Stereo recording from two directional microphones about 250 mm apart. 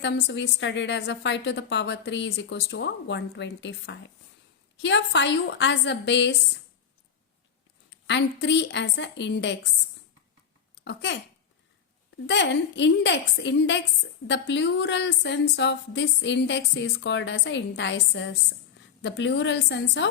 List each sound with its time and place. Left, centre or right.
0.0 s a woman's voice: left
8.0 s a woman's voice: left
10.8 s a woman's voice: left
12.2 s a woman's voice: left